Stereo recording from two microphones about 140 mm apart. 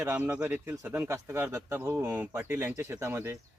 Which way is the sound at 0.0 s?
15° right (ahead or behind).